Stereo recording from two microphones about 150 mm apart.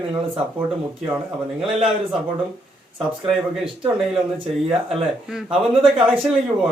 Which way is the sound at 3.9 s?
5° right (ahead or behind).